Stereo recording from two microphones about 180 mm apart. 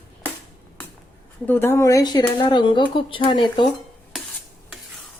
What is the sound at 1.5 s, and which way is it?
A woman's voice, 15° left (ahead or behind).